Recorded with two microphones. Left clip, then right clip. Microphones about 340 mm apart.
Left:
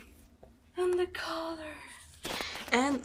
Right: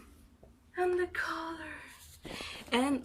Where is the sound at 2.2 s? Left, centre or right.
Left.